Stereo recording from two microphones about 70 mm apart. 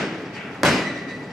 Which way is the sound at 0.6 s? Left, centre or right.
Centre.